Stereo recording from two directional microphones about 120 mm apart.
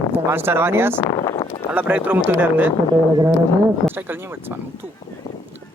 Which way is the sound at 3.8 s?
15° right (ahead or behind).